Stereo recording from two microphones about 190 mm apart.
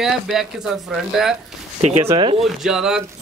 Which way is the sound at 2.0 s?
20° right (ahead or behind).